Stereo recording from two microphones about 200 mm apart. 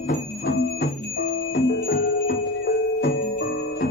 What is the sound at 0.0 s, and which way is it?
Music, 50° left (ahead or behind).